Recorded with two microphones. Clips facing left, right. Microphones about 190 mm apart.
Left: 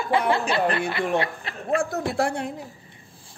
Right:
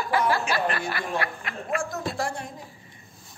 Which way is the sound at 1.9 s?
60° left (ahead or behind).